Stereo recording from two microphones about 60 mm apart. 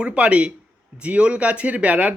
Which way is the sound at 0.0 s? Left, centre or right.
Centre.